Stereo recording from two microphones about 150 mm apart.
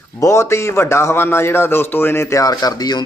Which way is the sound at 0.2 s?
20° left (ahead or behind).